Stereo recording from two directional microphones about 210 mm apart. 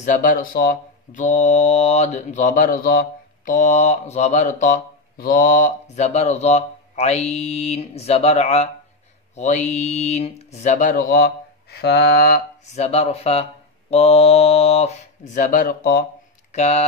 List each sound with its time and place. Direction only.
0.0 s speech: 40° left (ahead or behind)
12.7 s speech: 30° left (ahead or behind)
16.5 s speech: 30° left (ahead or behind)